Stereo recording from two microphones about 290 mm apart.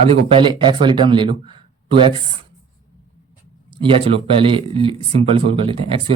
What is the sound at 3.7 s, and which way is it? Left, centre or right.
Speech, centre.